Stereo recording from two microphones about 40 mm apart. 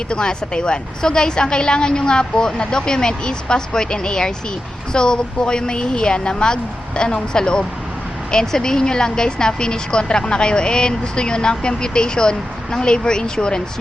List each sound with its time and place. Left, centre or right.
0.1 s speech: left